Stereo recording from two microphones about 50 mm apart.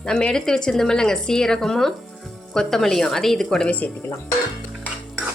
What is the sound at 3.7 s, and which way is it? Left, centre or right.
Speech, left.